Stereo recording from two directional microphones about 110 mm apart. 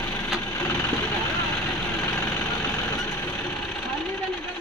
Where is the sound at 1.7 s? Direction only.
20° left (ahead or behind).